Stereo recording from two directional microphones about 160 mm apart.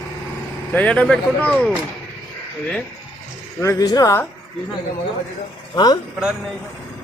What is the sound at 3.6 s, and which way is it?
Speech, 20° left (ahead or behind).